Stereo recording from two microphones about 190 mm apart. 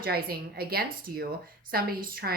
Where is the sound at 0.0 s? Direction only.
55° right (ahead or behind).